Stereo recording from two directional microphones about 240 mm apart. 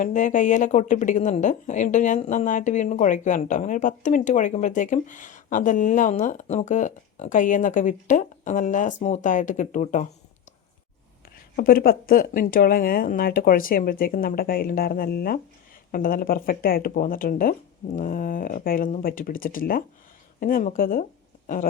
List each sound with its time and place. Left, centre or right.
0.0 s speech: left
11.3 s speech: left